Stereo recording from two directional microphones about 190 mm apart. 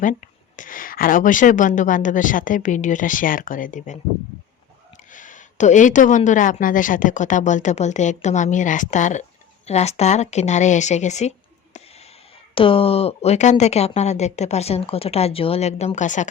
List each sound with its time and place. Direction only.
0.0 s speech: 45° left (ahead or behind)
5.1 s a woman's voice: 45° left (ahead or behind)